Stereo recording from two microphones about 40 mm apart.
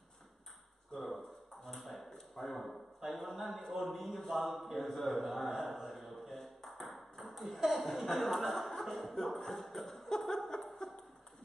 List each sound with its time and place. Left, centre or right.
0.9 s ping: centre
1.8 s ping: centre
2.0 s a sound: centre